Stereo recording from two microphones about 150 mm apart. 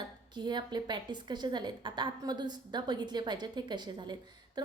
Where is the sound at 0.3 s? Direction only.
30° right (ahead or behind).